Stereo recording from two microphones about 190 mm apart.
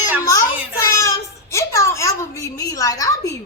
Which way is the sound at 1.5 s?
15° left (ahead or behind).